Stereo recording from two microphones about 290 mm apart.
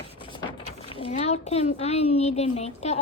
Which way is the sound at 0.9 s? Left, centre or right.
Centre.